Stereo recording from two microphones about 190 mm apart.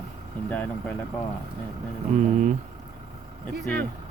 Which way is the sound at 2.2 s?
40° right (ahead or behind).